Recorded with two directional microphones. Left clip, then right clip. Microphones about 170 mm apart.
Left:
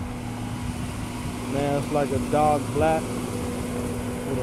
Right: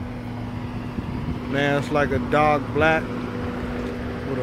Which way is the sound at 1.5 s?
15° right (ahead or behind).